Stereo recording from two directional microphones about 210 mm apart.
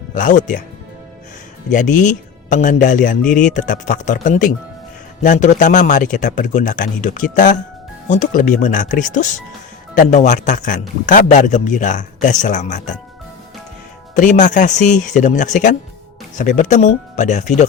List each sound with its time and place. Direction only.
0.1 s a man's voice: 40° left (ahead or behind)
1.7 s a man's voice: 35° left (ahead or behind)
14.2 s a man's voice: 35° left (ahead or behind)